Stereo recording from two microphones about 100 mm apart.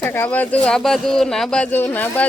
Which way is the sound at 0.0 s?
20° left (ahead or behind).